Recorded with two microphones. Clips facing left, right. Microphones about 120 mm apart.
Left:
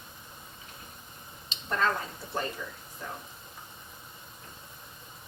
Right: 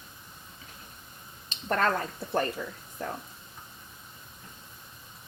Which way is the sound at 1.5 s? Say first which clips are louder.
Right 2 dB; 50° right (ahead or behind).